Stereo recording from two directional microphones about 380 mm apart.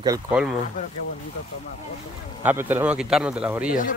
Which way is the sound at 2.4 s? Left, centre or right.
Centre.